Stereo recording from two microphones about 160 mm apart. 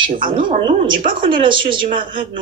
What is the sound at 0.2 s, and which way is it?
Speech, 60° right (ahead or behind).